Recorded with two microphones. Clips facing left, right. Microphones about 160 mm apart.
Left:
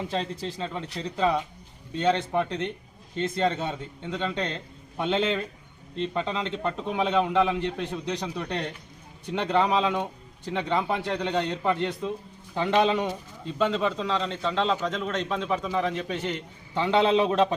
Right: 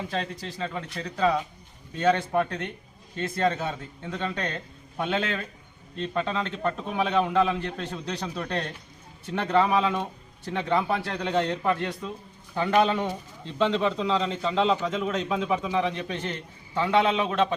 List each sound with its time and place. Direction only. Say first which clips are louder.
0.1 s a man's voice: left 2 dB; 25° left (ahead or behind)
16.8 s a man's voice: left 2 dB; 30° left (ahead or behind)